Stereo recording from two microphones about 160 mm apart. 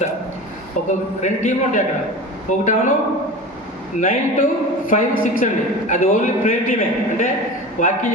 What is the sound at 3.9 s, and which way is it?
A man's voice, 55° left (ahead or behind).